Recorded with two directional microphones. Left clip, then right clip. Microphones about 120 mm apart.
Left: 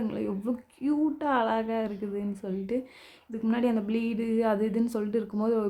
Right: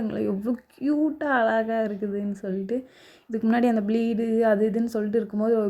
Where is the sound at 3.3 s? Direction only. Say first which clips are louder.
Right 5 dB; 40° right (ahead or behind); by 5.7 s 20° right (ahead or behind).